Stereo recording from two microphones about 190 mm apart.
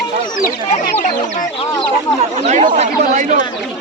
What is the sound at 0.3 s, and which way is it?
Speech, 45° left (ahead or behind).